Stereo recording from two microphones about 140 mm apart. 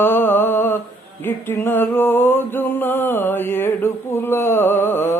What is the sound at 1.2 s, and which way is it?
Music, 15° left (ahead or behind).